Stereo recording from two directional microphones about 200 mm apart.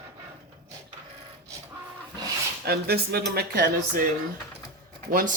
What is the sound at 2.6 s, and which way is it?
Speech, 50° right (ahead or behind).